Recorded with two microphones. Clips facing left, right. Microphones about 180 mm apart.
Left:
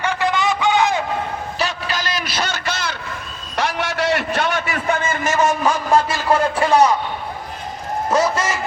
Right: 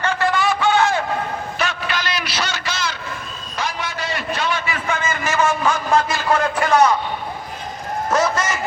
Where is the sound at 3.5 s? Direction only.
70° left (ahead or behind).